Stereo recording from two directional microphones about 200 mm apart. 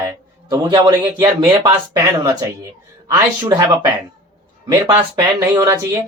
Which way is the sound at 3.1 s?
10° right (ahead or behind).